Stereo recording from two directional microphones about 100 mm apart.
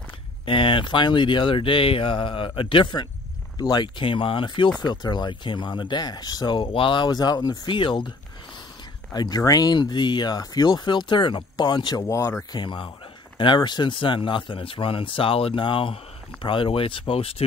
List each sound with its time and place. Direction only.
0.5 s speech: 60° left (ahead or behind)
4.8 s speech: 45° left (ahead or behind)
9.1 s speech: 40° left (ahead or behind)
12.5 s speech: 55° left (ahead or behind); by 17.5 s 75° left (ahead or behind)